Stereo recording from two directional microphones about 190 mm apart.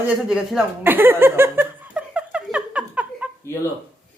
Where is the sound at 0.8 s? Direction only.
10° right (ahead or behind).